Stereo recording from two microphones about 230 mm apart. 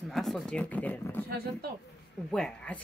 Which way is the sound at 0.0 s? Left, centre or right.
Centre.